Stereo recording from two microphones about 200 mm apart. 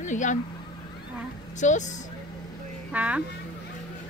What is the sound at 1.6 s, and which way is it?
Speech, 35° left (ahead or behind).